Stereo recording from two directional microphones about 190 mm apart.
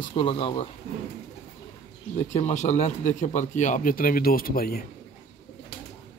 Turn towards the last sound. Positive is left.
turn(degrees=50)  # may be behind; listen again after turning